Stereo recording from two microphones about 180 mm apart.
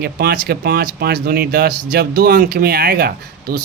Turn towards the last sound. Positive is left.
turn(degrees=-60)  # may be behind; listen again after turning